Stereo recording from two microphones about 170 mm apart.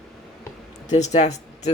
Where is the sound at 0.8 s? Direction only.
40° left (ahead or behind).